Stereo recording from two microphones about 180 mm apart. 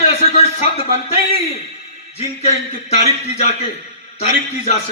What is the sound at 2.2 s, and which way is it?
Speech, 35° left (ahead or behind).